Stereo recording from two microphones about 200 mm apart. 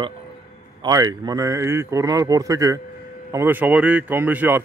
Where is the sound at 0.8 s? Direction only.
20° right (ahead or behind).